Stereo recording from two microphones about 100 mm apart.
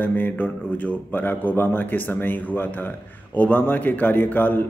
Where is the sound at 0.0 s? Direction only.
20° left (ahead or behind).